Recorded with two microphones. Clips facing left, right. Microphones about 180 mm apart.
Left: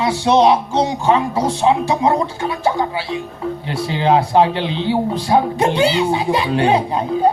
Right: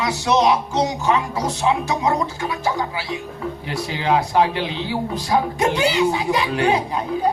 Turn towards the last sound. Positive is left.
turn(degrees=30)  # may be behind; listen again after turning